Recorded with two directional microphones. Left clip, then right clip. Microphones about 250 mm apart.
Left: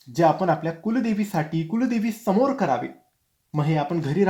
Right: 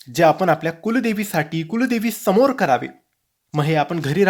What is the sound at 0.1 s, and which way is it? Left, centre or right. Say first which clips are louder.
Speech: right 4 dB; right.